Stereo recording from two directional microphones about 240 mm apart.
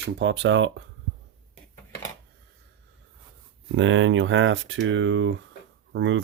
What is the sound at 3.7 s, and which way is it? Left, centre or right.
Speech, right.